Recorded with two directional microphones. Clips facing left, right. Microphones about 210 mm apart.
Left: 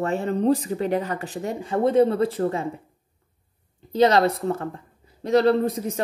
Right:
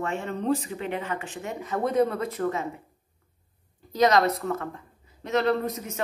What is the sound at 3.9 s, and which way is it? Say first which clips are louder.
Speech: left 3 dB; 30° left (ahead or behind).